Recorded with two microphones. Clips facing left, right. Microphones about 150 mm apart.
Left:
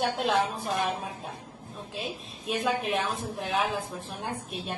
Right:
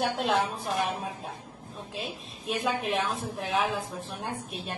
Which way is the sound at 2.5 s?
Centre (ahead or behind).